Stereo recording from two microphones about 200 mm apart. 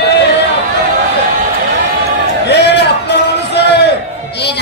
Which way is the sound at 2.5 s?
55° left (ahead or behind).